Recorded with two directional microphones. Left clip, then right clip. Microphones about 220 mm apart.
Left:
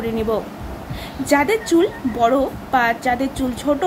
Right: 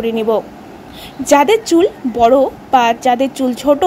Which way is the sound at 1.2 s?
30° right (ahead or behind).